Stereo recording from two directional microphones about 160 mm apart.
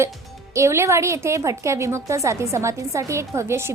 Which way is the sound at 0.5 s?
15° right (ahead or behind).